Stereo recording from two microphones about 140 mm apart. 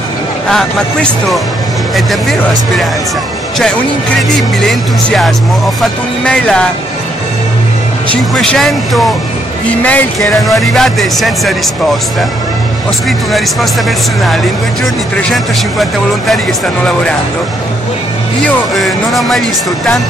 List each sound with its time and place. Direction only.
0.5 s speech: 5° left (ahead or behind)
4.6 s speech: centre (ahead or behind)
8.1 s speech: 5° left (ahead or behind)
15.2 s speech: centre (ahead or behind)
18.4 s speech: centre (ahead or behind)